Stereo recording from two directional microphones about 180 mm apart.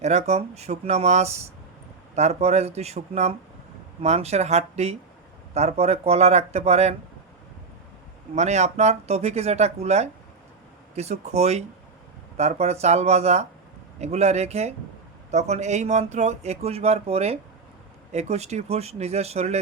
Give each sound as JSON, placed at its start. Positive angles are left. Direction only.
{"t": 0.0, "sound": "speech", "side_deg": -40}
{"t": 8.4, "sound": "speech", "side_deg": -40}